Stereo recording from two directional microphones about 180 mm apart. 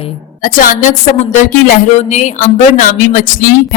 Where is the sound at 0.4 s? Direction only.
50° left (ahead or behind).